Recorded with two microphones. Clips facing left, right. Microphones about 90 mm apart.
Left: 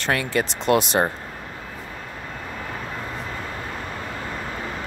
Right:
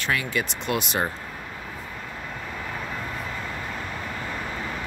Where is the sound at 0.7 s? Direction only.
35° left (ahead or behind).